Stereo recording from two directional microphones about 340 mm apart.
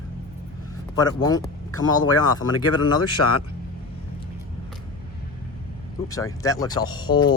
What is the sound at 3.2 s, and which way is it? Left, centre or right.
Speech, left.